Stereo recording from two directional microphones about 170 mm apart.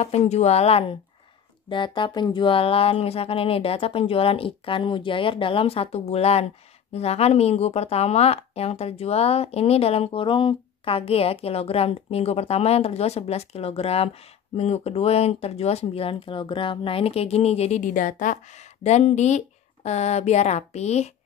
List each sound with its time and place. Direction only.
0.0 s speech: 40° left (ahead or behind)